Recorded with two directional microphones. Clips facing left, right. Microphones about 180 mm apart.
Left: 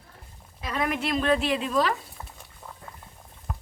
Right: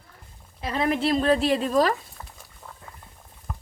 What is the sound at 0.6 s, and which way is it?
A woman's voice, 30° right (ahead or behind).